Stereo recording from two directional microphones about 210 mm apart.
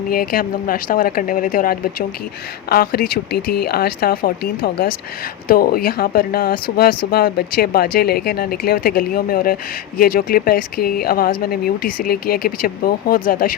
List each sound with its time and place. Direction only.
0.1 s speech: 45° left (ahead or behind)